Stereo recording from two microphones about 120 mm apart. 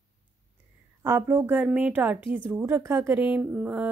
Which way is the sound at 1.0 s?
20° right (ahead or behind).